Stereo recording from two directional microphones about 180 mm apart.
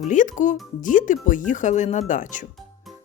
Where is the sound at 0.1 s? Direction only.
45° left (ahead or behind).